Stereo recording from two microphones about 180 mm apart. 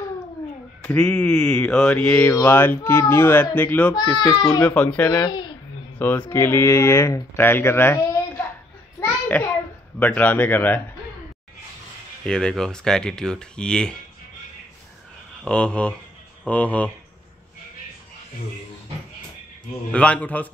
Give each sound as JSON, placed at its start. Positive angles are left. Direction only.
{"t": 0.8, "sound": "speech", "side_deg": 5}
{"t": 3.9, "sound": "speech", "side_deg": 25}
{"t": 4.6, "sound": "speech", "side_deg": 5}
{"t": 5.1, "sound": "a child's voice", "side_deg": 25}
{"t": 5.9, "sound": "speech", "side_deg": 10}
{"t": 9.0, "sound": "a sound", "side_deg": 10}
{"t": 9.9, "sound": "speech", "side_deg": 10}
{"t": 12.3, "sound": "speech", "side_deg": 5}
{"t": 15.4, "sound": "speech", "side_deg": 5}
{"t": 19.9, "sound": "speech", "side_deg": 5}